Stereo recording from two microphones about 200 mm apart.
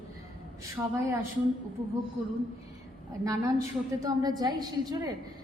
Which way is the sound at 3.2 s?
15° right (ahead or behind).